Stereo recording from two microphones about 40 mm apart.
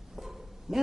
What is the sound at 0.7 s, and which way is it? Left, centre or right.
Speech, centre.